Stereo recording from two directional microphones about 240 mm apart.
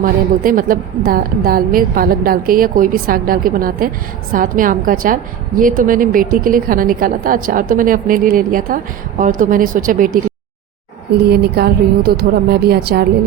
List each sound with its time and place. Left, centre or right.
0.0 s a woman's voice: right
11.3 s a woman's voice: right